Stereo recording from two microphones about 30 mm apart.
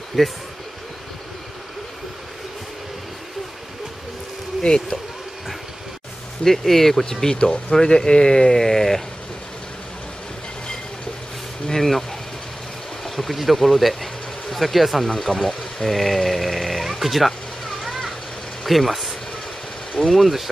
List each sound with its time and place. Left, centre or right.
0.2 s speech: centre
4.6 s speech: centre
6.4 s speech: centre
11.7 s speech: centre
13.0 s speech: centre
17.8 s vehicle: centre
18.6 s speech: centre